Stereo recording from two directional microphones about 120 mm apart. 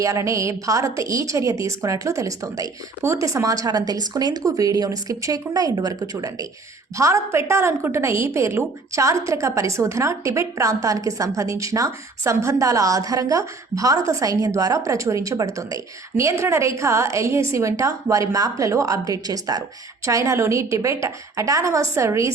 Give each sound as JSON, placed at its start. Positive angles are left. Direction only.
{"t": 0.0, "sound": "a woman's voice", "side_deg": -25}